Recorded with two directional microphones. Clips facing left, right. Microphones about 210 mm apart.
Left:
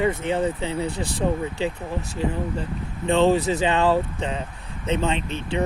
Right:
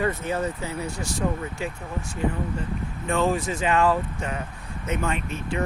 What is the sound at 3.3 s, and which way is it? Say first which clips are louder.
Speech: left 2 dB; 35° left (ahead or behind).